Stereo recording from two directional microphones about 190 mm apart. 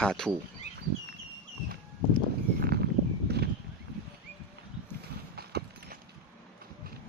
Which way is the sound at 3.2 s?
60° right (ahead or behind).